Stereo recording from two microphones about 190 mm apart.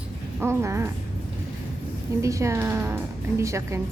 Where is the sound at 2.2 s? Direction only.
15° right (ahead or behind).